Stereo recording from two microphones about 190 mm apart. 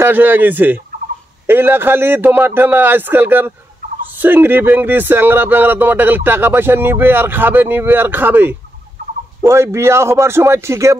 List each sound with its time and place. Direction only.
0.0 s speech: 10° right (ahead or behind)